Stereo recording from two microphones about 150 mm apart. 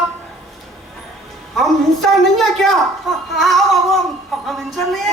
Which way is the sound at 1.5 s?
Centre (ahead or behind).